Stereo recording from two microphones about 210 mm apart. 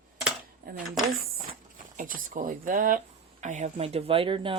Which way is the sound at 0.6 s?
45° right (ahead or behind).